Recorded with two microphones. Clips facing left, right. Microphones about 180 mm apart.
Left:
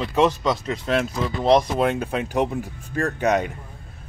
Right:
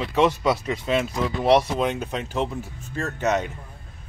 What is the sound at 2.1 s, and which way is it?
Speech, 10° left (ahead or behind).